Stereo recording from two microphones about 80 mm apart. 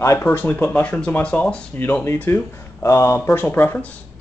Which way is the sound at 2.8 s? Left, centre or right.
Left.